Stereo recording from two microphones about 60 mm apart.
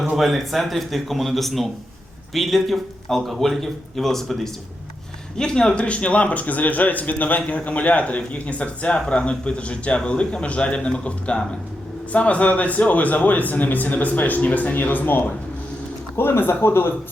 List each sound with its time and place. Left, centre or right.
0.0 s a man's voice: centre
5.4 s a man's voice: centre; by 16.9 s left